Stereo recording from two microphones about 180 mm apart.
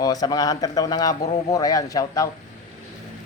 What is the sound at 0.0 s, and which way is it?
Speech, 20° left (ahead or behind).